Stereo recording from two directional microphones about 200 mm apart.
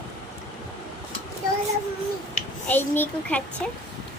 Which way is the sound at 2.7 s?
10° left (ahead or behind).